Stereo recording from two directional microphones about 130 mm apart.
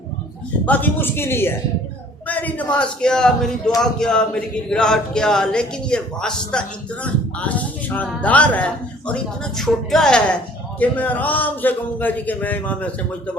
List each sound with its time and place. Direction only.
0.6 s a man's voice: 15° left (ahead or behind)